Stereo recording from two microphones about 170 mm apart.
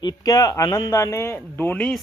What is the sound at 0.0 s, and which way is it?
Speech, 20° left (ahead or behind).